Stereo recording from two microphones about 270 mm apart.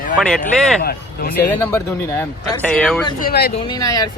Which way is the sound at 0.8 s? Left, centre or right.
Left.